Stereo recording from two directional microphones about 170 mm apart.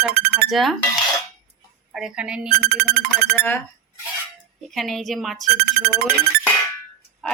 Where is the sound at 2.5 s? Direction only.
65° right (ahead or behind).